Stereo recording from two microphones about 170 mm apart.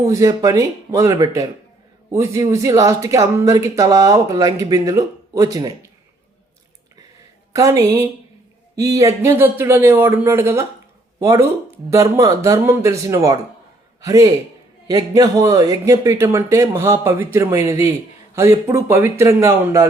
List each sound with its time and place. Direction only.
0.0 s speech: 20° right (ahead or behind)
7.5 s a man's voice: 20° right (ahead or behind)